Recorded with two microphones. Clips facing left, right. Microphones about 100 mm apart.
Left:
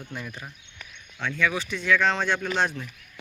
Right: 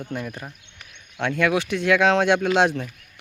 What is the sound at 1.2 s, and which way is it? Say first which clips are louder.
Speech: right 5 dB; 60° right (ahead or behind).